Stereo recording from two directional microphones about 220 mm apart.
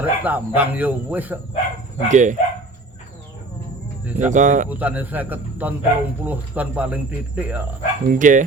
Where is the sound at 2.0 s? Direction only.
35° right (ahead or behind).